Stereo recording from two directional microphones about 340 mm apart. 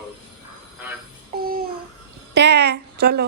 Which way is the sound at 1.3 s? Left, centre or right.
Right.